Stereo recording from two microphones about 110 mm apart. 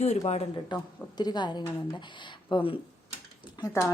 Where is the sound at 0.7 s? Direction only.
40° left (ahead or behind).